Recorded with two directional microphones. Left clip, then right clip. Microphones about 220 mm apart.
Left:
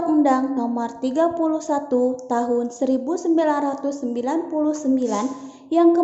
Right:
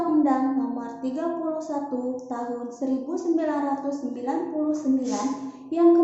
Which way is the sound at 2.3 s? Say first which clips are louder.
Left 9 dB; 40° left (ahead or behind).